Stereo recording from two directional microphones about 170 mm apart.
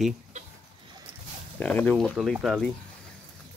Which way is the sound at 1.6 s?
10° left (ahead or behind).